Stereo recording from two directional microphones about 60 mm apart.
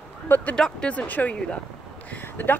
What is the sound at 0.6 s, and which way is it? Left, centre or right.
Speech, centre.